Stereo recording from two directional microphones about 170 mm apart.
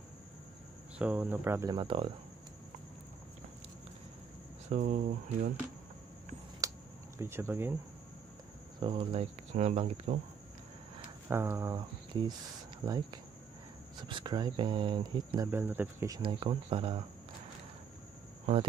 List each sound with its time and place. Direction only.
0.9 s speech: 10° right (ahead or behind)
1.7 s speech: 30° right (ahead or behind)
4.6 s speech: 45° right (ahead or behind)
6.6 s a sound: 20° right (ahead or behind)
7.2 s speech: 15° right (ahead or behind)
8.7 s speech: 30° right (ahead or behind)
11.2 s speech: 15° right (ahead or behind)
12.8 s speech: 25° right (ahead or behind)
16.2 s speech: 30° right (ahead or behind)
18.4 s cricket: 35° right (ahead or behind)